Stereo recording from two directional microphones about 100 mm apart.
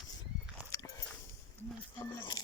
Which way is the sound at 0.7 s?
35° left (ahead or behind).